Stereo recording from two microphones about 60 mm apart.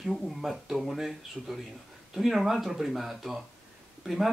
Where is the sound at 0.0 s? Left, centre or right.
Centre.